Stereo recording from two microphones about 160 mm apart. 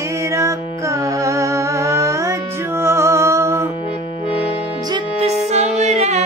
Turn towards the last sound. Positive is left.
turn(degrees=-45)  # may be behind; listen again after turning